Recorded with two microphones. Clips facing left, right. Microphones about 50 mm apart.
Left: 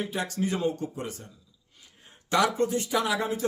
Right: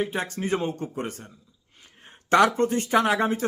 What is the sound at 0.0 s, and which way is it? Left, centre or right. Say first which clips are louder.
A man's voice: right 2 dB; right.